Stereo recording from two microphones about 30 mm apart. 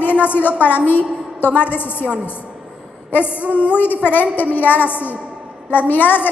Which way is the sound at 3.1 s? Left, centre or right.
Left.